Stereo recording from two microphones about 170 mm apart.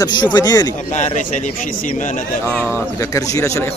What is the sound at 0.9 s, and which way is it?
Speech, 45° left (ahead or behind).